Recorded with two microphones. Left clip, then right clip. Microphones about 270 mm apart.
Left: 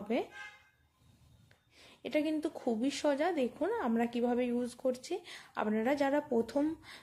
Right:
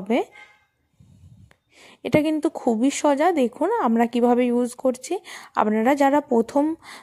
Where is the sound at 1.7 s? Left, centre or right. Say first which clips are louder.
Right 13 dB; right.